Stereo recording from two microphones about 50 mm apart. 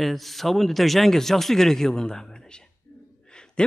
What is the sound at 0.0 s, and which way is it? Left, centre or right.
A man's voice, centre.